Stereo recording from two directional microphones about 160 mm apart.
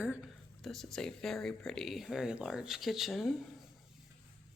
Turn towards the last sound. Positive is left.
turn(degrees=0)  # may be behind; listen again after turning